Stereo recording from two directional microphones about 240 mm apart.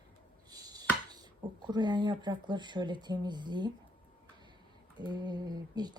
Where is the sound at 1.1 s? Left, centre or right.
Centre.